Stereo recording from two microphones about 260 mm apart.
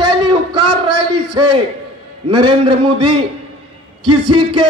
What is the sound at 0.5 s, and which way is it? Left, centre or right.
A man's voice, right.